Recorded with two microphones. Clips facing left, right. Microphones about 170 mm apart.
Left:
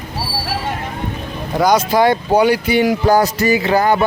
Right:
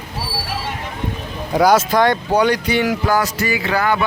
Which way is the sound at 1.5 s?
5° right (ahead or behind).